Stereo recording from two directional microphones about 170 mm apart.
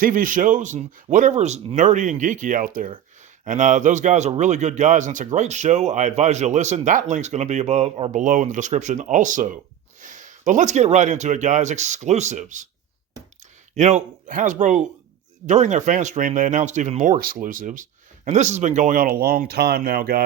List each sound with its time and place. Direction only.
0.0 s speech: 50° right (ahead or behind)
13.7 s speech: 45° right (ahead or behind); by 20.2 s 60° right (ahead or behind)